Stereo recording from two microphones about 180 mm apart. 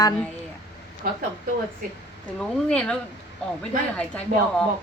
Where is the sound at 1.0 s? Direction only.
50° right (ahead or behind).